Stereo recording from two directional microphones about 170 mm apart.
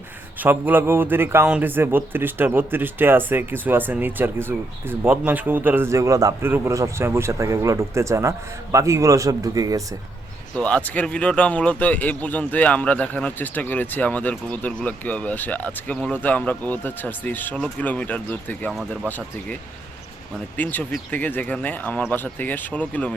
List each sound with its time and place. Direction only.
0.3 s a man's voice: 10° right (ahead or behind)
10.5 s speech: 5° left (ahead or behind)
20.6 s speech: 10° left (ahead or behind)